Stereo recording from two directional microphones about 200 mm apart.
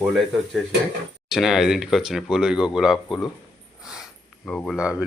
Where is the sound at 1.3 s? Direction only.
Centre (ahead or behind).